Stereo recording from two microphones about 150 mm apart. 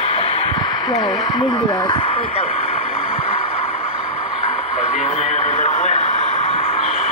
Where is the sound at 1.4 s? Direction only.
30° left (ahead or behind).